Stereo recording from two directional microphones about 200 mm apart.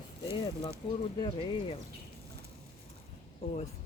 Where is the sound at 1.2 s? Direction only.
25° left (ahead or behind).